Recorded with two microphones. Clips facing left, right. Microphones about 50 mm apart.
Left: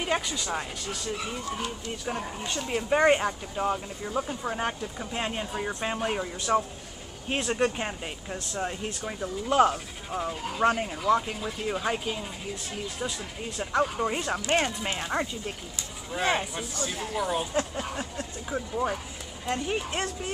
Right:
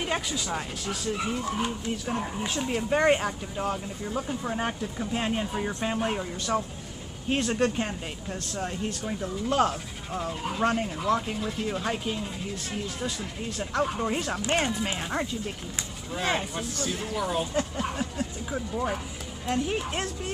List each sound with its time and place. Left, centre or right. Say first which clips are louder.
0.0 s speech: left 1 dB; centre
6.1 s speech: left 2 dB; centre